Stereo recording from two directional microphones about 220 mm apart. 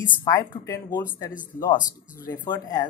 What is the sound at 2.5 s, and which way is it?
Speech, 10° left (ahead or behind).